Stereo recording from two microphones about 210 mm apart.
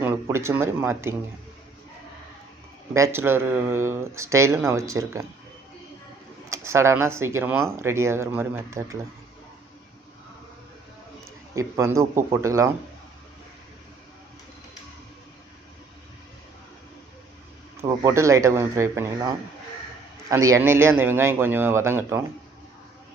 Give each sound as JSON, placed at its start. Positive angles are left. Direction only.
{"t": 0.0, "sound": "speech", "side_deg": -10}
{"t": 2.9, "sound": "speech", "side_deg": -10}
{"t": 6.5, "sound": "speech", "side_deg": -15}
{"t": 11.5, "sound": "speech", "side_deg": -15}
{"t": 17.7, "sound": "speech", "side_deg": -15}